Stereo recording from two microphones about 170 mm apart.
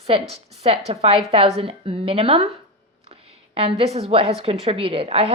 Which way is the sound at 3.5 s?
35° right (ahead or behind).